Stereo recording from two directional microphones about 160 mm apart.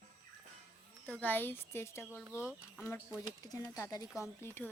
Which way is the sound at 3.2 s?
25° left (ahead or behind).